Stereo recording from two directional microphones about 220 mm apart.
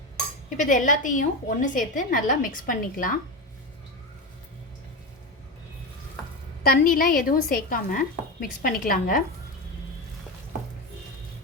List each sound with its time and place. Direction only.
0.5 s a woman's voice: 35° left (ahead or behind)
6.6 s a woman's voice: 40° left (ahead or behind)